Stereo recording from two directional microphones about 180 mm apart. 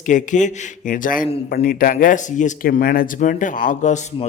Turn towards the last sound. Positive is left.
turn(degrees=40)  # may be behind; listen again after turning